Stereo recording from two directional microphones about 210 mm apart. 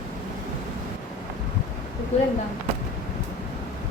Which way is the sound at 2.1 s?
30° left (ahead or behind).